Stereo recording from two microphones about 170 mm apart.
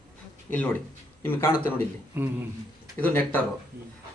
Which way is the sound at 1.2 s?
15° left (ahead or behind).